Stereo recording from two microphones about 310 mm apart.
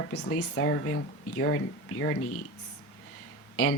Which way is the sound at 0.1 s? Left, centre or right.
Left.